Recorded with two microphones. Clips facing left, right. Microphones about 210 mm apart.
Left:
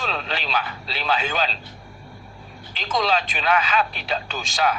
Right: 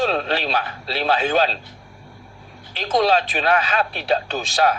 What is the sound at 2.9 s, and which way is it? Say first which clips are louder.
Speech: right 5 dB; 45° right (ahead or behind).